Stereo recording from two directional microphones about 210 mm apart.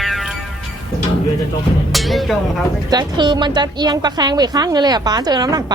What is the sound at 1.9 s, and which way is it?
Speech, centre (ahead or behind).